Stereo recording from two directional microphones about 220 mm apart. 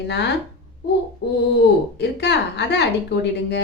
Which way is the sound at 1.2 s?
50° left (ahead or behind).